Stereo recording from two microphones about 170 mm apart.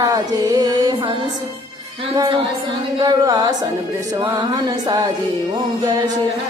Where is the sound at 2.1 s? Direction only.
20° right (ahead or behind).